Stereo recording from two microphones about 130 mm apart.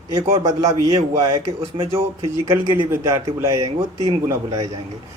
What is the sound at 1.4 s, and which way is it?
Speech, 45° right (ahead or behind).